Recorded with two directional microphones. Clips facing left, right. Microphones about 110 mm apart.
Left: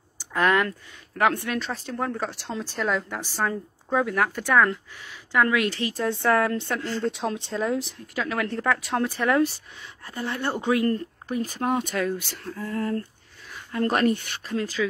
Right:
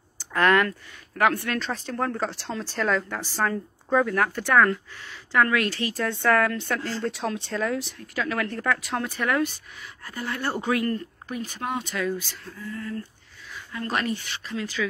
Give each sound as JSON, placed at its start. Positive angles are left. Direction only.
{"t": 0.2, "sound": "a sound", "side_deg": 15}
{"t": 1.2, "sound": "speech", "side_deg": 15}
{"t": 1.6, "sound": "a woman's voice", "side_deg": 0}
{"t": 10.9, "sound": "speech", "side_deg": 35}
{"t": 13.7, "sound": "speech", "side_deg": 45}